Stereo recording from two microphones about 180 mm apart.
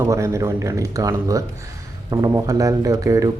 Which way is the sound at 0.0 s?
15° right (ahead or behind).